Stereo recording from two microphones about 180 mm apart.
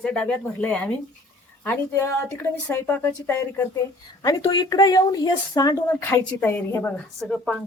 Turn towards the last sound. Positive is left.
turn(degrees=5)  # may be behind; listen again after turning